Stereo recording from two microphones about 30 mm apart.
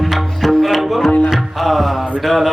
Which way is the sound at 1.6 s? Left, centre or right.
Centre.